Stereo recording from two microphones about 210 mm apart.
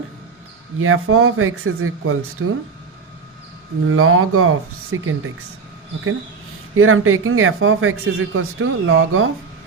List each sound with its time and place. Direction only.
0.8 s speech: 80° right
2.4 s speech: 80° right
3.8 s speech: 90° right
6.7 s speech: 80° right